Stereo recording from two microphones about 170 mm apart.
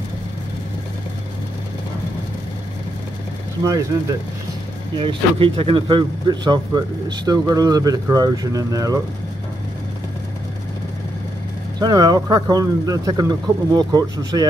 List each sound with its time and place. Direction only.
3.6 s speech: 20° right (ahead or behind)
4.9 s speech: 30° right (ahead or behind)
11.8 s speech: 20° right (ahead or behind)